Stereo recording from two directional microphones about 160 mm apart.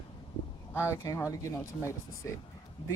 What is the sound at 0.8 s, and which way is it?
Speech, 15° left (ahead or behind).